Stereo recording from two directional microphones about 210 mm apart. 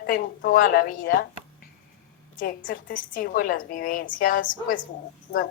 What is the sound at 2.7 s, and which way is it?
A woman's voice, 40° left (ahead or behind).